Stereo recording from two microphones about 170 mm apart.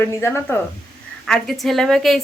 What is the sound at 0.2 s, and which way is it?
Speech, 15° left (ahead or behind).